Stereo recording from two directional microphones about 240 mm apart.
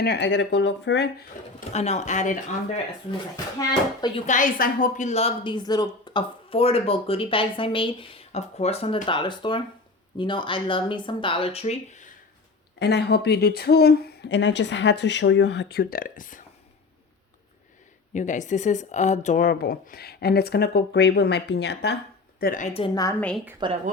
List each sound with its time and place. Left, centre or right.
0.0 s speech: left
1.7 s a woman's voice: left
4.3 s a woman's voice: left
12.8 s speech: left
18.1 s a woman's voice: left
23.6 s a woman's voice: centre